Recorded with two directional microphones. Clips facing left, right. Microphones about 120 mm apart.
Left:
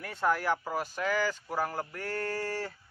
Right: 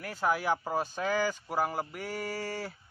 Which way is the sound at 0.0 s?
5° right (ahead or behind).